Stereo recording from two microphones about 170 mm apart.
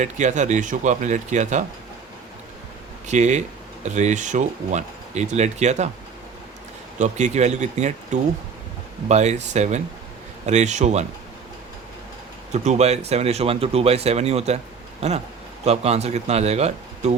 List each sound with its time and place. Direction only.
0.0 s speech: 45° right (ahead or behind)
3.1 s speech: 45° right (ahead or behind)
7.0 s speech: 45° right (ahead or behind)
12.5 s speech: 40° right (ahead or behind)
15.6 s speech: 40° right (ahead or behind)